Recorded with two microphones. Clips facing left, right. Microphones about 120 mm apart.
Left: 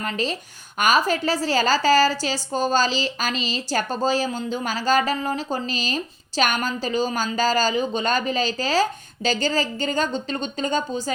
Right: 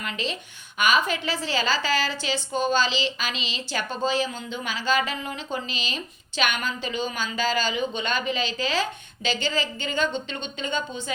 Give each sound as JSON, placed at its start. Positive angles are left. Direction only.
{"t": 0.0, "sound": "a woman's voice", "side_deg": 40}